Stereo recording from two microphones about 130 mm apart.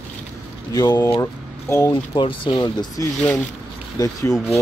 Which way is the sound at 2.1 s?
40° left (ahead or behind).